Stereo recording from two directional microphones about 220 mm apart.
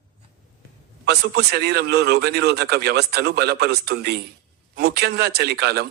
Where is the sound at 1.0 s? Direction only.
45° right (ahead or behind).